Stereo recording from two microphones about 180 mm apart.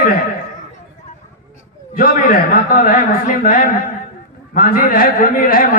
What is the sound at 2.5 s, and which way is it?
A man's voice, 50° left (ahead or behind).